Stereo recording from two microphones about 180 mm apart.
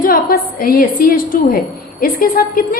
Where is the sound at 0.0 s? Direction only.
55° left (ahead or behind).